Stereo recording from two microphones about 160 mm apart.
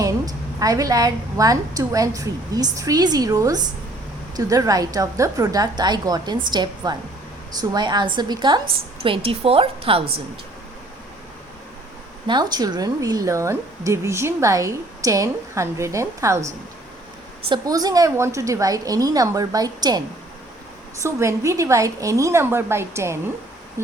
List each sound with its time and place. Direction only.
0.0 s a woman's voice: 20° right (ahead or behind)
12.3 s speech: 25° right (ahead or behind)
17.5 s speech: 25° right (ahead or behind)
21.0 s speech: 20° right (ahead or behind)
23.8 s a sound: 15° right (ahead or behind)